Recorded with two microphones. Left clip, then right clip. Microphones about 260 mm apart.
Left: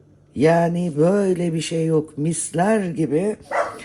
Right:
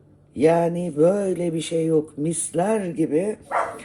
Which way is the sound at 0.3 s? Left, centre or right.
Left.